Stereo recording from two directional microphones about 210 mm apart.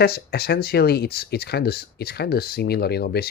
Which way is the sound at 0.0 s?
50° left (ahead or behind).